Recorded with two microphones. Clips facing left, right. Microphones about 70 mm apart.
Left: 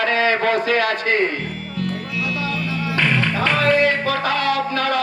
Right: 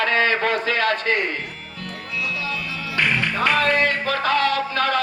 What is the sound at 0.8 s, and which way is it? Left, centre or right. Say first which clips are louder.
Speech: left 1 dB; right.